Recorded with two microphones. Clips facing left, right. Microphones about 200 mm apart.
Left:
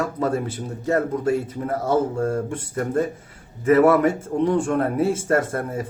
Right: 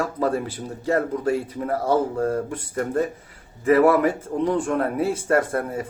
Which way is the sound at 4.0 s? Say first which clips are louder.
Left 2 dB; 30° left (ahead or behind).